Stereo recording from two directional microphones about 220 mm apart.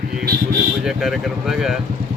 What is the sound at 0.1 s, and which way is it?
Speech, 40° right (ahead or behind).